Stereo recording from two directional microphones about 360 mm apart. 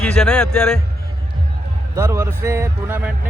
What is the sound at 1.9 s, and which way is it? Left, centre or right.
A man's voice, centre.